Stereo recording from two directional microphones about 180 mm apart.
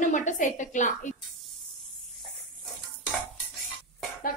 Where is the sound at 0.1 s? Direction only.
45° left (ahead or behind).